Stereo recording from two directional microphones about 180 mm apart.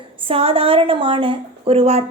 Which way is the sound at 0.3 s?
30° right (ahead or behind).